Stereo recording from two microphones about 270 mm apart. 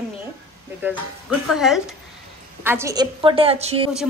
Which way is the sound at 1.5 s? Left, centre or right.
Centre.